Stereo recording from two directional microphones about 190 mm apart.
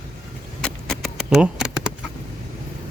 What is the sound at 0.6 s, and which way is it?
Keys jangling, centre (ahead or behind).